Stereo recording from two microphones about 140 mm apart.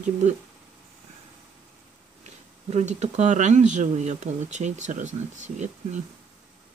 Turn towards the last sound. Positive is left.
turn(degrees=-60)  # may be behind; listen again after turning